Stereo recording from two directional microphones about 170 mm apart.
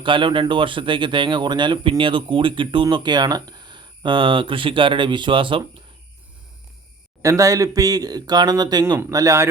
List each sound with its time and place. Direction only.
0.0 s speech: 30° right (ahead or behind)
7.2 s a man's voice: 20° right (ahead or behind)